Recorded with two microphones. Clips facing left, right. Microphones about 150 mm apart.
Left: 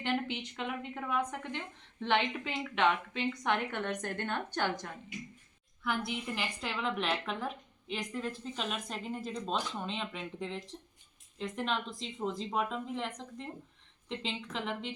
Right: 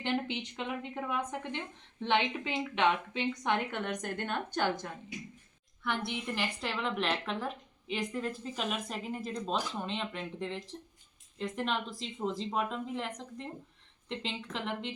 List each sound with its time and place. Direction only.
0.0 s a woman's voice: 20° right (ahead or behind)
5.8 s a woman's voice: 5° left (ahead or behind)